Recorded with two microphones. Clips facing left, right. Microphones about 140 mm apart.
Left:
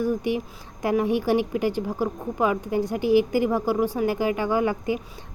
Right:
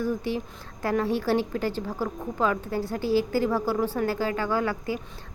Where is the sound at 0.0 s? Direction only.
15° left (ahead or behind).